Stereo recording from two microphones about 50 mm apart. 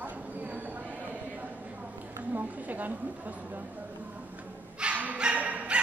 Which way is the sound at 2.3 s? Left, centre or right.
Right.